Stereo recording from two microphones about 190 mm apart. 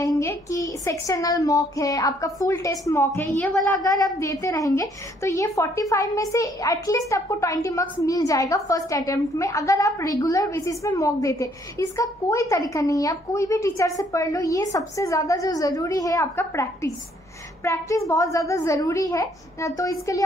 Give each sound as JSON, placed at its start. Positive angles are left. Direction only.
{"t": 0.0, "sound": "a woman's voice", "side_deg": 15}